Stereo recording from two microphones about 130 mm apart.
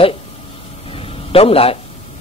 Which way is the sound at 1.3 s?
50° left (ahead or behind).